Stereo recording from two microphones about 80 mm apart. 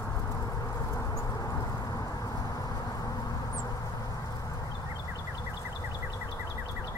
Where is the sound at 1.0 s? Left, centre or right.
Left.